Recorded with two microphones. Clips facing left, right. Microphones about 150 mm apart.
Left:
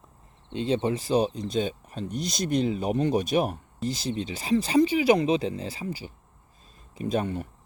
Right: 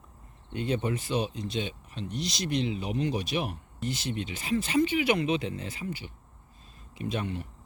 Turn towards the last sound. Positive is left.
turn(degrees=45)  # may be behind; listen again after turning